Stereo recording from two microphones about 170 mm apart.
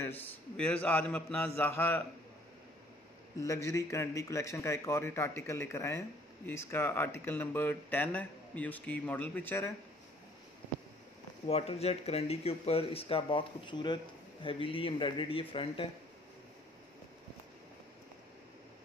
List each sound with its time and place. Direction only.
0.0 s a man's voice: 10° left (ahead or behind)
3.3 s a man's voice: 20° left (ahead or behind)
11.4 s speech: 35° left (ahead or behind)